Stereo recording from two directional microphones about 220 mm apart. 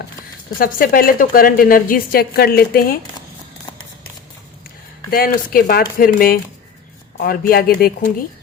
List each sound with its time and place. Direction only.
0.6 s a woman's voice: 40° left (ahead or behind)
5.1 s a woman's voice: 40° left (ahead or behind)